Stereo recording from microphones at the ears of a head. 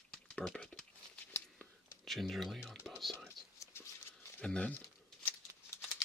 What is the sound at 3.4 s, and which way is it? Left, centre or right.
Whispering, left.